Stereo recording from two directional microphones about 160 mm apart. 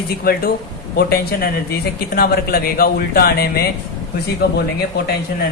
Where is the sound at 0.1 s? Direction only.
75° left (ahead or behind).